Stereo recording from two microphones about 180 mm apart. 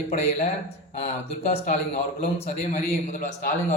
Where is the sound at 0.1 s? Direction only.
40° left (ahead or behind).